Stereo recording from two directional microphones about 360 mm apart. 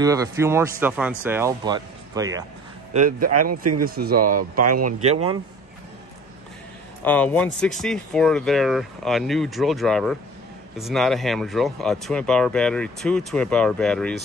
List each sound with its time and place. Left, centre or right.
0.0 s speech: centre
2.9 s speech: right
4.2 s speech: right
7.0 s speech: centre